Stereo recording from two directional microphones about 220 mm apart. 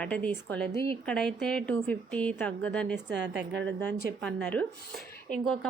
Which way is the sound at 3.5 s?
55° right (ahead or behind).